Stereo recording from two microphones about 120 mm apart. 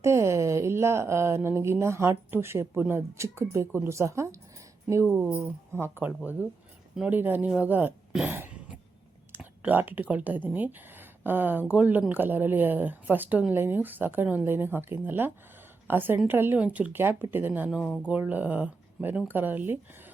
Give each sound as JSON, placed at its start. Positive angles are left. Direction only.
{"t": 0.0, "sound": "a woman's voice", "side_deg": -25}
{"t": 5.0, "sound": "a woman's voice", "side_deg": -10}
{"t": 8.3, "sound": "throat clearing", "side_deg": -15}
{"t": 9.3, "sound": "a woman's voice", "side_deg": -15}
{"t": 17.8, "sound": "speech", "side_deg": 5}
{"t": 18.1, "sound": "a woman's voice", "side_deg": -15}